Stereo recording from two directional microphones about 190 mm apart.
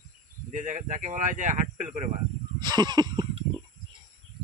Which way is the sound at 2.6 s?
20° right (ahead or behind).